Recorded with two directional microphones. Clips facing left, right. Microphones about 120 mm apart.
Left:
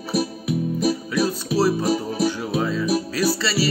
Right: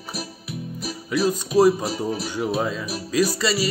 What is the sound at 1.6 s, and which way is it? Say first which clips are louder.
Music: right 4 dB; 15° right (ahead or behind).